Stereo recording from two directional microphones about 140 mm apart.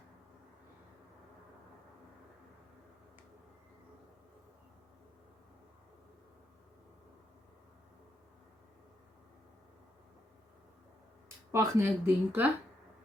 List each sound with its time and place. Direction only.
11.5 s speech: 20° right (ahead or behind)